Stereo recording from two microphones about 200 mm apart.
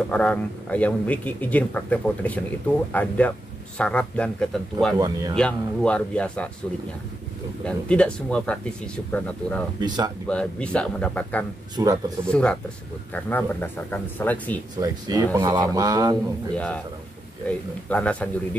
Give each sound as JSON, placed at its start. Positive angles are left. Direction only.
{"t": 0.1, "sound": "speech", "side_deg": 5}
{"t": 4.9, "sound": "speech", "side_deg": -20}
{"t": 5.3, "sound": "speech", "side_deg": 5}
{"t": 7.6, "sound": "speech", "side_deg": 5}
{"t": 9.8, "sound": "speech", "side_deg": -20}
{"t": 10.2, "sound": "speech", "side_deg": 5}
{"t": 11.7, "sound": "speech", "side_deg": -20}
{"t": 12.3, "sound": "speech", "side_deg": 5}
{"t": 14.8, "sound": "speech", "side_deg": -20}
{"t": 17.5, "sound": "speech", "side_deg": 5}